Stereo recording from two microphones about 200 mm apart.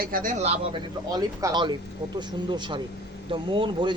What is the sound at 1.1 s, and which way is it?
A woman's voice, 15° right (ahead or behind).